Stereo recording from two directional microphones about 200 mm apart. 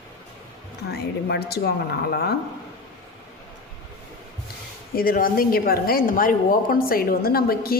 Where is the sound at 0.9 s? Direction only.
55° left (ahead or behind).